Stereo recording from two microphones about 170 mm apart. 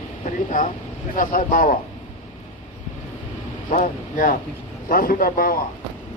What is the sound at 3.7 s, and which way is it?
Speech, 50° left (ahead or behind).